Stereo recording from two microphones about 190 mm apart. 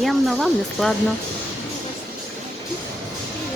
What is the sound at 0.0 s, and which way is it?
Speech, centre (ahead or behind).